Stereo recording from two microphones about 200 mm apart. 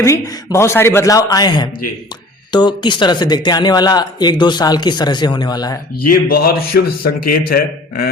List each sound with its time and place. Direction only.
0.0 s a man's voice: 15° left (ahead or behind)
6.1 s a man's voice: 50° left (ahead or behind)